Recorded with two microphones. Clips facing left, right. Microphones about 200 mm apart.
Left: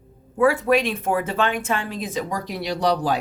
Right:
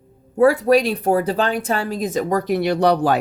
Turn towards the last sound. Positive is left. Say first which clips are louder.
# right 5 dB
turn(degrees=-60)  # may be behind; listen again after turning